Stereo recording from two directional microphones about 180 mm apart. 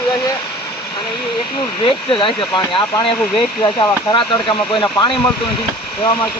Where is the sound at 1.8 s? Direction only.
30° left (ahead or behind).